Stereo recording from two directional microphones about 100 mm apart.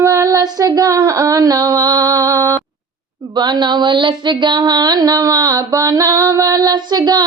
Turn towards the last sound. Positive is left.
turn(degrees=-45)  # may be behind; listen again after turning